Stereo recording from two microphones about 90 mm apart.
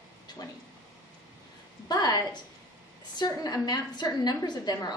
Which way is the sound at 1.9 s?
50° left (ahead or behind).